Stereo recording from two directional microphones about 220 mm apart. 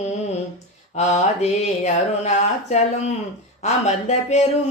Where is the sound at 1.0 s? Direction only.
30° left (ahead or behind).